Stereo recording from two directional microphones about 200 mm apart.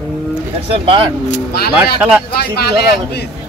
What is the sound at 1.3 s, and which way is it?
A man's voice, 50° left (ahead or behind).